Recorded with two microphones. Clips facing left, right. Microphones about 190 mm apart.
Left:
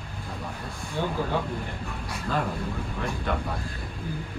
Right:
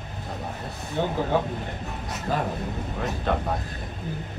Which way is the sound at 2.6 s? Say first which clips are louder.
Right 1 dB; 20° right (ahead or behind).